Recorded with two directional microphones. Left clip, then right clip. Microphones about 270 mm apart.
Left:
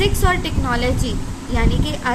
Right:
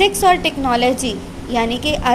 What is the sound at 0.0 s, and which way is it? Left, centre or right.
A woman's voice, centre.